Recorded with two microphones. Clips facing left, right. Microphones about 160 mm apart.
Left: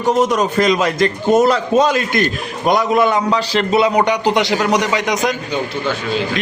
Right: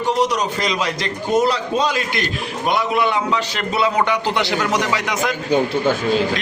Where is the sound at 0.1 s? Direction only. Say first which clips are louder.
Left 5 dB; 50° left (ahead or behind).